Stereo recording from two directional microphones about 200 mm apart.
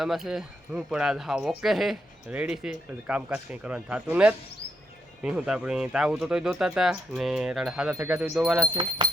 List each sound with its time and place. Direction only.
0.0 s speech: centre (ahead or behind)
8.7 s speech: 20° right (ahead or behind)